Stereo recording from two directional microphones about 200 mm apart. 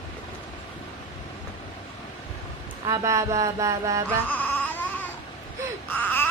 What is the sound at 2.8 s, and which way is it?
Mantra, 15° right (ahead or behind).